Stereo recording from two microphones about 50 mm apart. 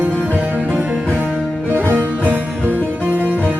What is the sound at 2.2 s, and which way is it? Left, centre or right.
Music, right.